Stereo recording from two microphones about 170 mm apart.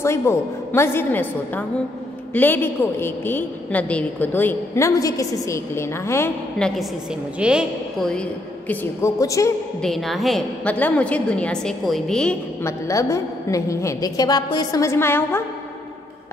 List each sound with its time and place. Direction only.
0.0 s a woman's voice: 15° left (ahead or behind)
6.6 s a woman's voice: centre (ahead or behind)
9.0 s a woman's voice: 20° left (ahead or behind)
9.8 s a woman's voice: centre (ahead or behind)
12.6 s a woman's voice: 20° left (ahead or behind)